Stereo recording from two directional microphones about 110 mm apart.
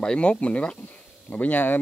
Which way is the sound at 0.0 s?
5° left (ahead or behind).